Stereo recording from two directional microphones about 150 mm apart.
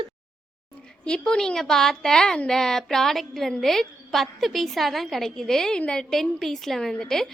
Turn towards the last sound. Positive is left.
turn(degrees=5)  # may be behind; listen again after turning